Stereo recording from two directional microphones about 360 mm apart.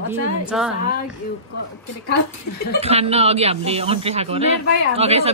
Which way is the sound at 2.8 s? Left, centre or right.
Centre.